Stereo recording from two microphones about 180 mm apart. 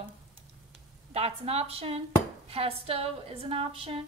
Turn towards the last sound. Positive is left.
turn(degrees=-30)  # may be behind; listen again after turning